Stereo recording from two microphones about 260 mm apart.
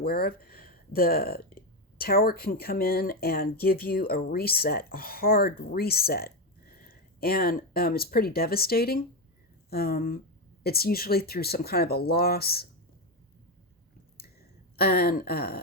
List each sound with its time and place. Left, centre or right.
0.0 s speech: left
14.8 s speech: left